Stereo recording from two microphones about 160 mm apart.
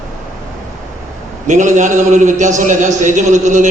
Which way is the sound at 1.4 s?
50° right (ahead or behind).